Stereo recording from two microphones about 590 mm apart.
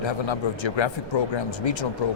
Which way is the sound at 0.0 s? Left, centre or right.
Left.